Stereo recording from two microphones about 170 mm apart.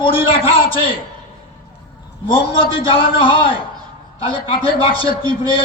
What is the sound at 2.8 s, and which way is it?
Speech, 30° left (ahead or behind).